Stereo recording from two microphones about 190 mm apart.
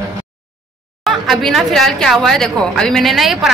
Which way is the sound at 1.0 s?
Centre (ahead or behind).